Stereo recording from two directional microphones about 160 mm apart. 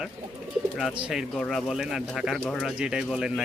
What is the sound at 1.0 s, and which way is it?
Speech, 5° right (ahead or behind).